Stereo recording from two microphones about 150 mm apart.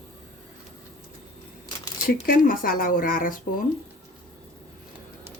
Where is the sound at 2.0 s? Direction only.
80° left.